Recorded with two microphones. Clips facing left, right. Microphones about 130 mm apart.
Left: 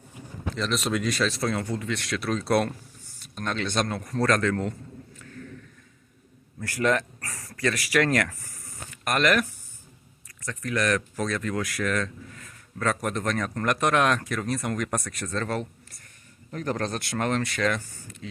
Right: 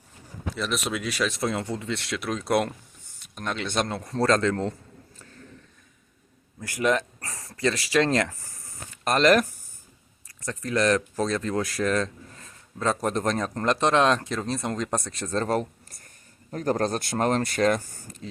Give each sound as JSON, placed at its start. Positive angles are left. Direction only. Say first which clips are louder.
{"t": 0.5, "sound": "speech", "louder": "left 2 dB", "side_deg": -10}
{"t": 6.6, "sound": "speech", "louder": "even", "side_deg": -15}